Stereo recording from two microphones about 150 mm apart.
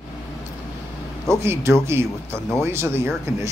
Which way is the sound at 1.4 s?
15° right (ahead or behind).